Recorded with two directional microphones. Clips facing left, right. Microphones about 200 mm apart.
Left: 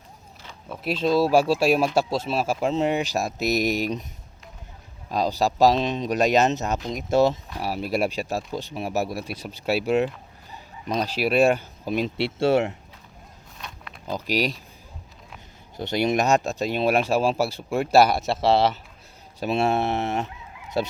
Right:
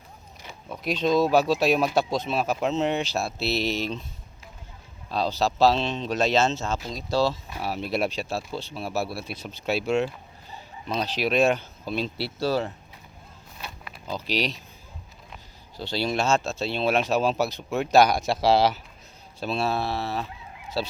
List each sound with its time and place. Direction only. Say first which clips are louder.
0.7 s speech: left 1 dB; 5° left (ahead or behind)
5.1 s speech: left 2 dB; 10° left (ahead or behind)
7.6 s speech: left 2 dB; 10° left (ahead or behind)
12.1 s speech: left 6 dB; 25° left (ahead or behind)
13.6 s pig: right 1 dB; 5° right (ahead or behind)
14.1 s speech: left 3 dB; 10° left (ahead or behind)
15.8 s speech: left 4 dB; 20° left (ahead or behind); by 18.8 s centre (ahead or behind)
19.4 s speech: left 4 dB; 20° left (ahead or behind)